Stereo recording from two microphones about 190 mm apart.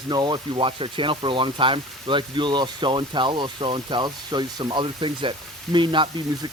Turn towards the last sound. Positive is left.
turn(degrees=-25)  # may be behind; listen again after turning